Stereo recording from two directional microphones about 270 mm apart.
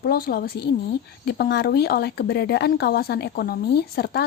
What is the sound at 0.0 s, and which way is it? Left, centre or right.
A woman's voice, left.